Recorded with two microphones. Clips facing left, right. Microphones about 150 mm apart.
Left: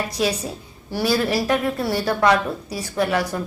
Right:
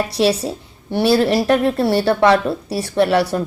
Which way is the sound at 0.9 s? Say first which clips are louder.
Right 6 dB; 25° right (ahead or behind).